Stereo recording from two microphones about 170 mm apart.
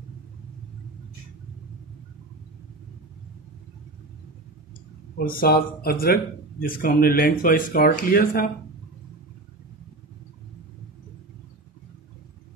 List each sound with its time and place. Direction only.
5.1 s speech: 60° left (ahead or behind)